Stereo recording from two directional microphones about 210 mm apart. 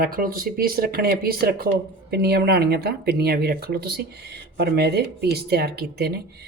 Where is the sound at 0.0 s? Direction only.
45° right (ahead or behind).